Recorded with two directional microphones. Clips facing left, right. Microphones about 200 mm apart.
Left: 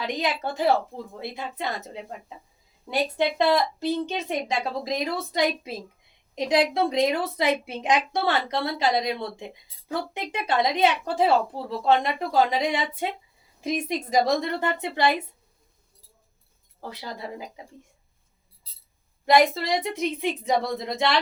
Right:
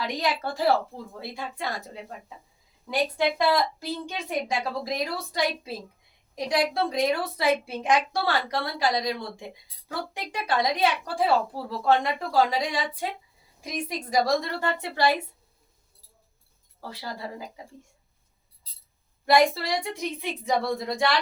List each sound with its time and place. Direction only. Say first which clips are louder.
0.0 s a woman's voice: left 1 dB; 20° left (ahead or behind)
3.2 s a woman's voice: left 2 dB; 20° left (ahead or behind)
16.8 s a woman's voice: left 1 dB; 20° left (ahead or behind)
19.2 s a woman's voice: left 1 dB; 20° left (ahead or behind)